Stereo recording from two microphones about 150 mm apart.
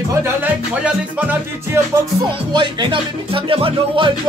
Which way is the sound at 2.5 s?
30° right (ahead or behind).